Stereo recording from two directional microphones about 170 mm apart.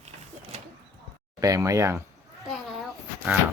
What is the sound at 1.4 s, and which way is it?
Speech, 20° right (ahead or behind).